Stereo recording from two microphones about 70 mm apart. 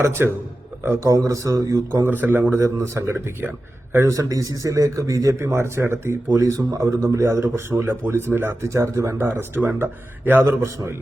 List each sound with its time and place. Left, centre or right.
0.0 s speech: right
0.9 s a man's voice: right
2.0 s speech: right
2.6 s a man's voice: right
4.1 s a man's voice: right
8.7 s a man's voice: right
9.6 s speech: right